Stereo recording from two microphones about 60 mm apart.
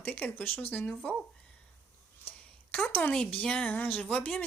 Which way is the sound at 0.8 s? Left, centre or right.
Left.